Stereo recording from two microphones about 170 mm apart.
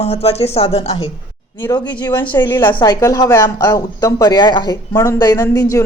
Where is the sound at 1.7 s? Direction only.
25° left (ahead or behind).